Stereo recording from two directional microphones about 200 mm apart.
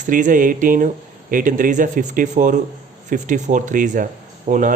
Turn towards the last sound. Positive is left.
turn(degrees=-40)  # may be behind; listen again after turning